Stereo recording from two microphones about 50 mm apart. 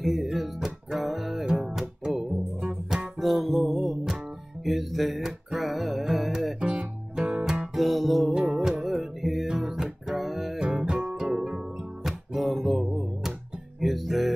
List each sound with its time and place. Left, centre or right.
0.0 s music: centre
1.4 s music: centre
3.2 s music: centre
6.6 s music: centre
10.6 s music: centre